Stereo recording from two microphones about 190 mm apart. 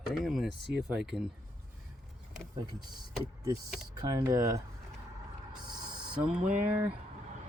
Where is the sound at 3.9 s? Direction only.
20° right (ahead or behind).